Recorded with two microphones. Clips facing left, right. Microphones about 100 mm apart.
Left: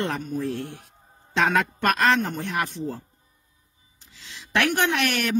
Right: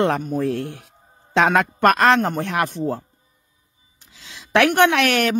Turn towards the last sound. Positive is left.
turn(degrees=-70)  # may be behind; listen again after turning